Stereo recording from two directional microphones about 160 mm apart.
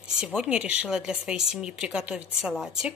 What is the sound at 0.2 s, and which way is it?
Speech, 5° right (ahead or behind).